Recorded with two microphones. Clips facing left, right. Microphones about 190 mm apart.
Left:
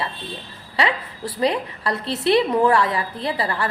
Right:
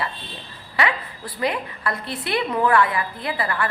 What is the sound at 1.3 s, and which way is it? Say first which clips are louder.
A woman's voice: left 3 dB; 30° left (ahead or behind).